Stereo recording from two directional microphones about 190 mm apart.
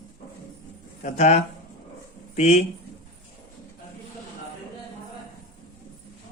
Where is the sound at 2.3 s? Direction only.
35° left (ahead or behind).